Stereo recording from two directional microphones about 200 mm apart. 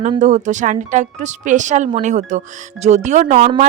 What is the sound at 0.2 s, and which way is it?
Speech, 35° right (ahead or behind).